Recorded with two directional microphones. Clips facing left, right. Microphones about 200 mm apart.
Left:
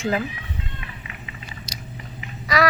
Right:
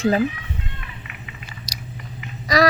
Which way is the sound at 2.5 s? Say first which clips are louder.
Right 3 dB; 40° right (ahead or behind).